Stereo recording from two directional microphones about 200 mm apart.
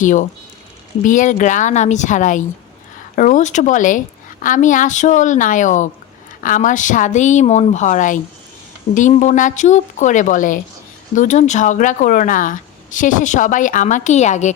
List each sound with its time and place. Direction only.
0.0 s speech: 40° left (ahead or behind)